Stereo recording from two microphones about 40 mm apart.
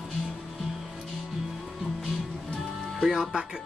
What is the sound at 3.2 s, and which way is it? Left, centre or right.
Speech, centre.